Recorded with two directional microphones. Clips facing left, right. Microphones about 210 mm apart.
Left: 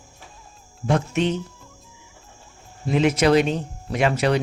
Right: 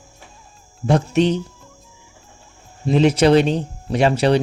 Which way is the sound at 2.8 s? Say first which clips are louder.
Right 4 dB; 30° right (ahead or behind).